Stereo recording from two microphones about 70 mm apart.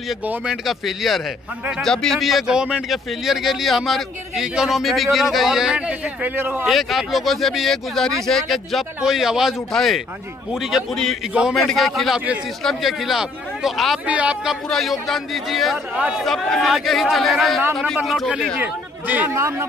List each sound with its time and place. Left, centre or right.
0.5 s a man's voice: centre
2.4 s a man's voice: centre
6.3 s speech: right
6.6 s a man's voice: centre
14.0 s speech: centre
14.5 s a man's voice: centre
15.9 s speech: centre
16.2 s a man's voice: centre
18.6 s speech: right